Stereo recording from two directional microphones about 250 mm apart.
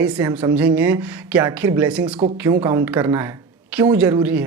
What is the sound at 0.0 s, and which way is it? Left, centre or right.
A woman's voice, centre.